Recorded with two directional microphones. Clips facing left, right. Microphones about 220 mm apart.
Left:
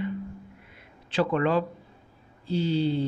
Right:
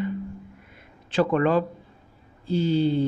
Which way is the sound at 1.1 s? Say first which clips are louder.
Right 3 dB; 50° right (ahead or behind).